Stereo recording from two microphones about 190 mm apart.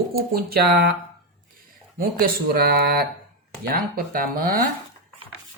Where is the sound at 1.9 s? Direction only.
50° right (ahead or behind).